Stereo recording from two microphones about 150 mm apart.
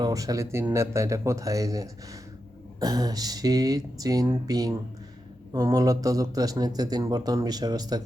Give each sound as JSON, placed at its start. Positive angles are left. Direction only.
{"t": 0.0, "sound": "speech", "side_deg": -25}